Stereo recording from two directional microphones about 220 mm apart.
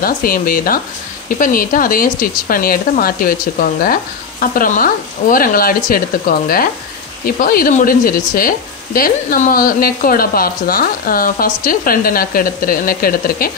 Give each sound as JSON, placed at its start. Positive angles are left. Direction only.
{"t": 0.0, "sound": "speech", "side_deg": 40}